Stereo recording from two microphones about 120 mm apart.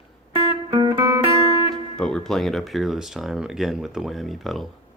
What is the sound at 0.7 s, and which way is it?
Music, 40° right (ahead or behind).